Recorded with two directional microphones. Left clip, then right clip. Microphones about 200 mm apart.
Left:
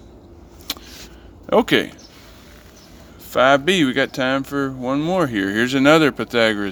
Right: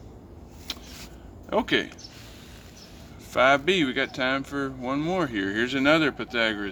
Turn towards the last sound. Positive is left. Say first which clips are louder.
# left 8 dB
turn(degrees=40)  # may be behind; listen again after turning